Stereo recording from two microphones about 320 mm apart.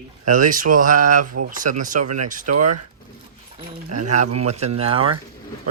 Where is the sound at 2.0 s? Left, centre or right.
Right.